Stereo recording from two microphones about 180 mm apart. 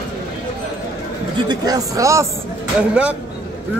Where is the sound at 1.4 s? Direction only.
20° right (ahead or behind).